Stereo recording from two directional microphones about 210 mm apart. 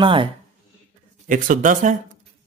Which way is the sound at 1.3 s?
40° right (ahead or behind).